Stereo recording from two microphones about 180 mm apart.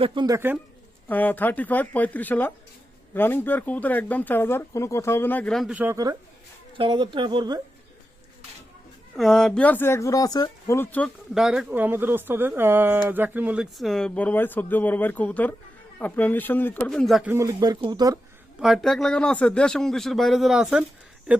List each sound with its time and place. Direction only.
0.0 s speech: 25° right (ahead or behind)
0.3 s speech: 10° right (ahead or behind)
1.0 s speech: 10° left (ahead or behind); by 7.6 s 25° right (ahead or behind)
9.1 s speech: centre (ahead or behind)
11.3 s speech: 5° right (ahead or behind)
17.3 s speech: 20° right (ahead or behind)
18.6 s speech: centre (ahead or behind)